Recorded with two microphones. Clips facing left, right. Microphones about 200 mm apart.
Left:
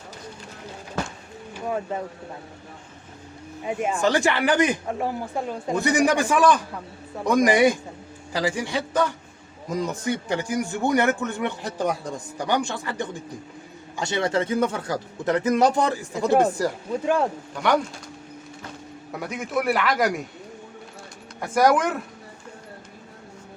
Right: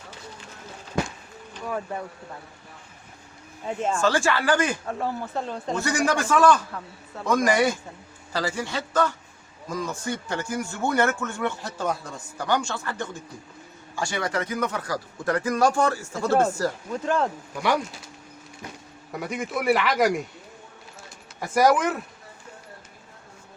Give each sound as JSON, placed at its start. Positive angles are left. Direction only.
{"t": 1.6, "sound": "speech", "side_deg": 20}
{"t": 3.6, "sound": "speech", "side_deg": 15}
{"t": 19.1, "sound": "a man's voice", "side_deg": 0}
{"t": 21.4, "sound": "a man's voice", "side_deg": 0}